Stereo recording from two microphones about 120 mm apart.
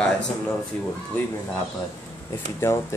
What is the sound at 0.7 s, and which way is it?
Speech, 10° left (ahead or behind).